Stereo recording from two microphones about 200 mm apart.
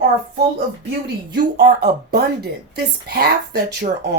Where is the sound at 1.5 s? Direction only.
50° right (ahead or behind).